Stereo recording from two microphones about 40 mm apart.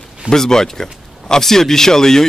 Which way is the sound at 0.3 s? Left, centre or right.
Centre.